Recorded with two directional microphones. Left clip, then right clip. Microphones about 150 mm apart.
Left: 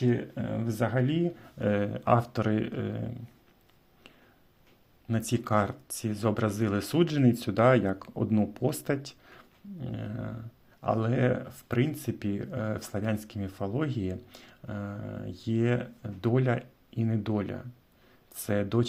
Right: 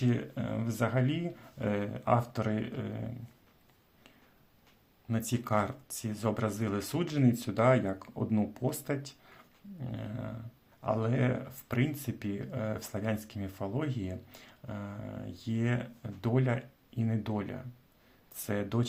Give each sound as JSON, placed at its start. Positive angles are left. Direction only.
{"t": 0.0, "sound": "speech", "side_deg": 10}
{"t": 5.0, "sound": "speech", "side_deg": 25}